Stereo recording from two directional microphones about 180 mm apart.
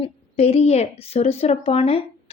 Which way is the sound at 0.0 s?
35° left (ahead or behind).